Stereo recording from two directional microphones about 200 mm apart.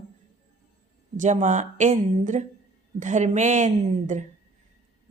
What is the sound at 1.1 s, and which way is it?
A woman's voice, 40° right (ahead or behind).